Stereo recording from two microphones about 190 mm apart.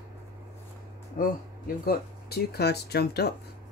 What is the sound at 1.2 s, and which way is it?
Speech, 45° left (ahead or behind).